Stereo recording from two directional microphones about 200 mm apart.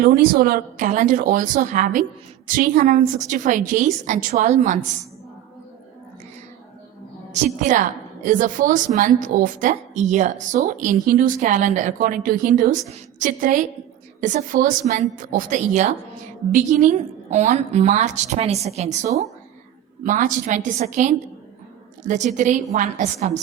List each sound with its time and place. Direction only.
0.0 s a woman's voice: 45° right (ahead or behind)
7.3 s a woman's voice: 35° right (ahead or behind)